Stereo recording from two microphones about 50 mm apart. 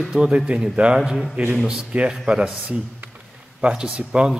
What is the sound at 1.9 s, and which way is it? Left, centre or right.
Speech, right.